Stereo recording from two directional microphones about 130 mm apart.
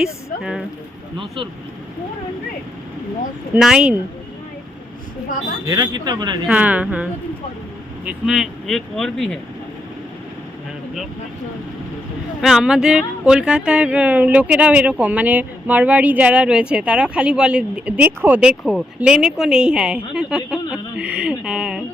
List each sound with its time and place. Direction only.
0.0 s speech: 5° right (ahead or behind)
3.5 s speech: 5° right (ahead or behind)
5.6 s speech: 30° right (ahead or behind)
6.5 s speech: 10° right (ahead or behind); by 9.4 s 5° left (ahead or behind)
12.4 s speech: 5° right (ahead or behind)